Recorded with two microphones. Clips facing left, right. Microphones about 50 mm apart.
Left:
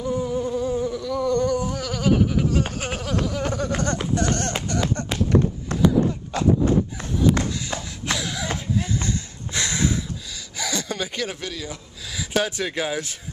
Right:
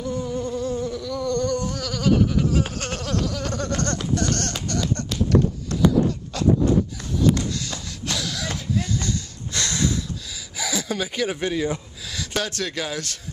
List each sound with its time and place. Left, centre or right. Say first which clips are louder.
0.0 s insect: left 2 dB; centre
5.7 s a sound: left 1 dB; left
6.3 s horse: left 1 dB; left
7.6 s a sound: left 3 dB; left
10.6 s gasp: right 1 dB; centre
11.4 s speech: right 8 dB; right
12.2 s speech: left 3 dB; centre